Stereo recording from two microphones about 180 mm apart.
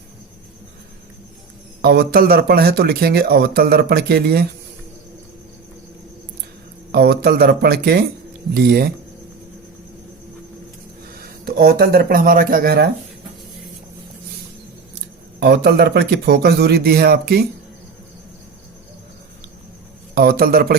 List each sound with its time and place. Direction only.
1.8 s speech: 60° right (ahead or behind)
6.9 s speech: 60° right (ahead or behind)
11.4 s speech: 60° right (ahead or behind)
15.4 s speech: 65° right (ahead or behind)
20.1 s speech: 55° right (ahead or behind)